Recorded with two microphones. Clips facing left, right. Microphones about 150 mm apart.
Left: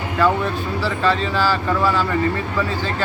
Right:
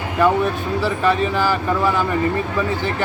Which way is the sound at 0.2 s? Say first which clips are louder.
Right 2 dB; 15° right (ahead or behind).